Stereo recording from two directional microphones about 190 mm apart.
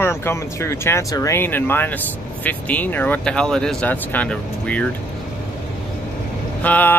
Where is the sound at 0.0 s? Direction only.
15° left (ahead or behind).